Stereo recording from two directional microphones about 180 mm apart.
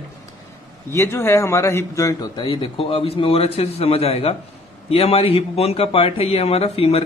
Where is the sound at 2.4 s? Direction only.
30° left (ahead or behind).